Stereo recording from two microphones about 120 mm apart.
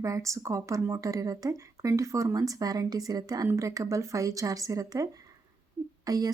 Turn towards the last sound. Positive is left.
turn(degrees=-30)  # may be behind; listen again after turning